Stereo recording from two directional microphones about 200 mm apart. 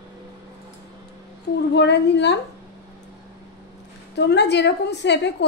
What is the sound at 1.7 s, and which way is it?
Speech, 60° left (ahead or behind).